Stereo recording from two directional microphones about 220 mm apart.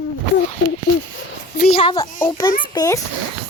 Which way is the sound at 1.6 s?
25° left (ahead or behind).